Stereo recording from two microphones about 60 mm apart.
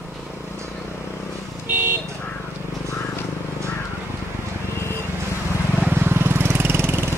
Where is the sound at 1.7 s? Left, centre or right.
Right.